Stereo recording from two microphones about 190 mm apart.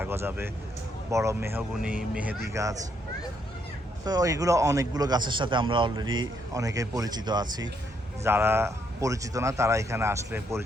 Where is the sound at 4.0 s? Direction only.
20° right (ahead or behind).